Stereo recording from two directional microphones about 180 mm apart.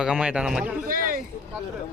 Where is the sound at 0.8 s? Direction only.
50° right (ahead or behind).